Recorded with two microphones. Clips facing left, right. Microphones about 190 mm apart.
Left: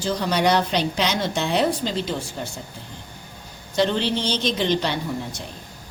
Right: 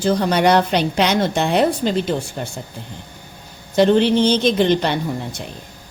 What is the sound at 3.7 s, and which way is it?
A woman's voice, 55° right (ahead or behind).